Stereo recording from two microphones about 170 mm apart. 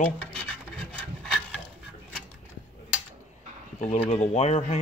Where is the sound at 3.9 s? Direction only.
40° left (ahead or behind).